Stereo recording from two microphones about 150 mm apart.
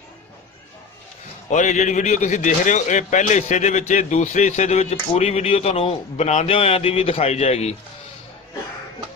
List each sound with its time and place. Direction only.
1.5 s speech: 55° left (ahead or behind)